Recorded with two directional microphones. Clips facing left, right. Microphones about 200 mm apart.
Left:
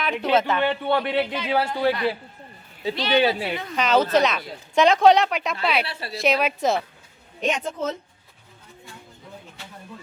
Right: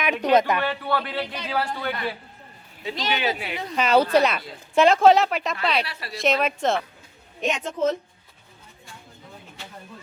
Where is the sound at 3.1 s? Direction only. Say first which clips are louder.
Left 11 dB; 35° left (ahead or behind).